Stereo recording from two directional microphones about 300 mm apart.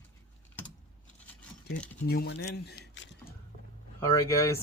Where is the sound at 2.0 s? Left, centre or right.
Left.